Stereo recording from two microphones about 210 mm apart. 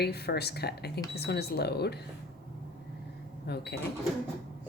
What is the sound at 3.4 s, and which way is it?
Speech, 50° left (ahead or behind).